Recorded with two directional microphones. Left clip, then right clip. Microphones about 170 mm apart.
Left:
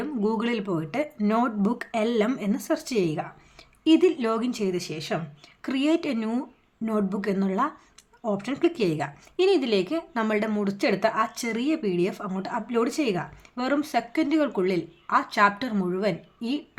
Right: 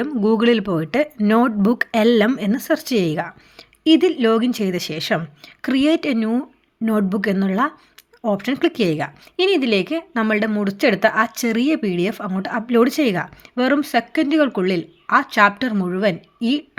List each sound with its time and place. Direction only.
0.2 s speech: 25° right (ahead or behind)
5.6 s speech: 25° right (ahead or behind)
6.8 s speech: 25° right (ahead or behind)